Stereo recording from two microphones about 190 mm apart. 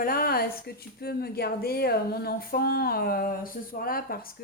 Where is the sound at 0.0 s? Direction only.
50° left (ahead or behind).